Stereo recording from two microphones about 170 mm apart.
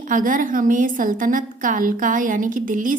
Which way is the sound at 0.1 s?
50° right (ahead or behind).